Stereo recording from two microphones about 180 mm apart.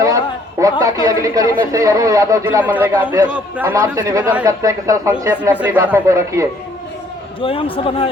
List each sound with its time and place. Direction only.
0.6 s a man's voice: 20° right (ahead or behind)
7.4 s a man's voice: 30° left (ahead or behind)